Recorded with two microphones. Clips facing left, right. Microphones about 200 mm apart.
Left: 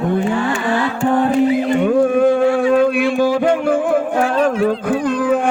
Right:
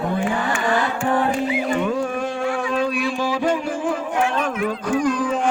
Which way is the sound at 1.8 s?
55° left (ahead or behind).